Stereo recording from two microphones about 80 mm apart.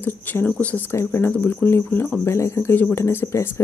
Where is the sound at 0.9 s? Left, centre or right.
Left.